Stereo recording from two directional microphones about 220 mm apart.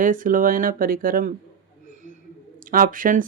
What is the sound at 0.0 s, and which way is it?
Speech, 35° right (ahead or behind).